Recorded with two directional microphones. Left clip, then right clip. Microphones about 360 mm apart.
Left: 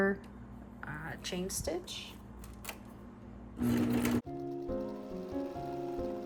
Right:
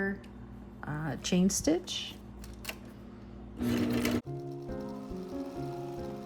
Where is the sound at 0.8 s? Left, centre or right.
Centre.